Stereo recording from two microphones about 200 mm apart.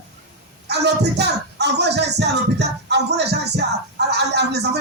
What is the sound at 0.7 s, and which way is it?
Speech, 55° right (ahead or behind).